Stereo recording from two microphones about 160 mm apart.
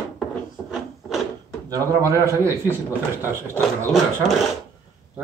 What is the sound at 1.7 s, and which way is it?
Speech, 20° right (ahead or behind).